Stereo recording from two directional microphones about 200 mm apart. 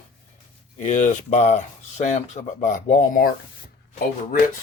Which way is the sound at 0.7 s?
40° left (ahead or behind).